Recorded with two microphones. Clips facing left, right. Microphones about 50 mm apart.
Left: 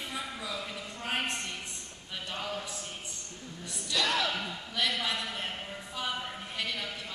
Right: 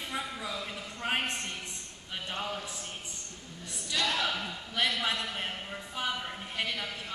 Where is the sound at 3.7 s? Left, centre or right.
Right.